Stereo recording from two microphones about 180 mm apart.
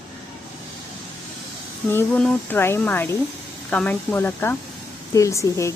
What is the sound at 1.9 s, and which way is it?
Speech, 10° left (ahead or behind).